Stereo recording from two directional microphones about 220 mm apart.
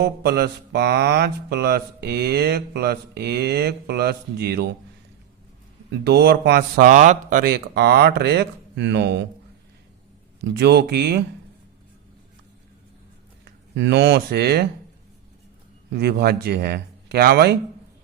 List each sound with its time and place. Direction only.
0.0 s mantra: 45° right (ahead or behind)
6.1 s mantra: 45° right (ahead or behind)
10.5 s mantra: 50° right (ahead or behind)
13.4 s speech: 55° right (ahead or behind)
15.9 s mantra: 50° right (ahead or behind)